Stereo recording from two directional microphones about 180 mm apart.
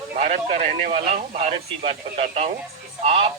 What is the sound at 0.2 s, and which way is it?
Speech, 40° right (ahead or behind).